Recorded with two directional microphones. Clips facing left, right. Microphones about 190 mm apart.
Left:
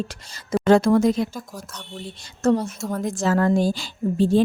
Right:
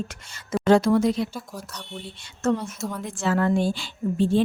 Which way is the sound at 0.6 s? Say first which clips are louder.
Left 2 dB; 50° left (ahead or behind).